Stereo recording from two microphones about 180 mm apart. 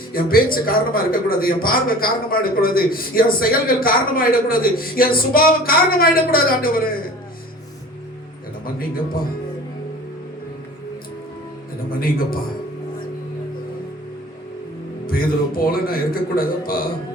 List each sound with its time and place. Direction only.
0.1 s a man's voice: 55° left (ahead or behind)
11.9 s a man's voice: 55° left (ahead or behind)
15.0 s a man's voice: 55° left (ahead or behind)